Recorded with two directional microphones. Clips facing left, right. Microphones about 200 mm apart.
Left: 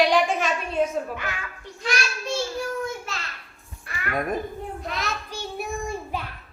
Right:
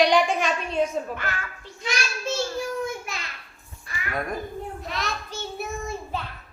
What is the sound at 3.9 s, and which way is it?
Music, 65° left (ahead or behind).